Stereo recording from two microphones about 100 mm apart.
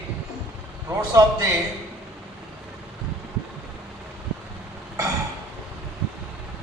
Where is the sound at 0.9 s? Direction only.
35° right (ahead or behind).